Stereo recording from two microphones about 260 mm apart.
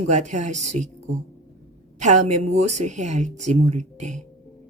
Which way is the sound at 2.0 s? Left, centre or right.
Right.